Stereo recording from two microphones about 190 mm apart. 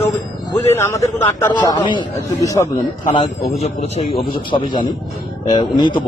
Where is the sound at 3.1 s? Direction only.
30° left (ahead or behind).